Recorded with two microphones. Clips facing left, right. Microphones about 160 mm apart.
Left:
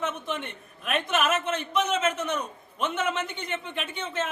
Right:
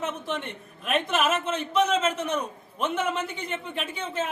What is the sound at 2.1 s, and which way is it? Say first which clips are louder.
Speech: right 1 dB; 30° right (ahead or behind).